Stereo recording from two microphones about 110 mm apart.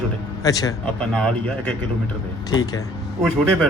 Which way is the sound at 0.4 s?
35° left (ahead or behind).